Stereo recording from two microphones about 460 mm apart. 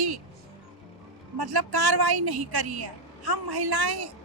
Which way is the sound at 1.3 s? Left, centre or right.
Right.